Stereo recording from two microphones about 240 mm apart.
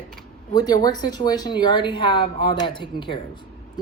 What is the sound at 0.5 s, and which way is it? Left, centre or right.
Speech, centre.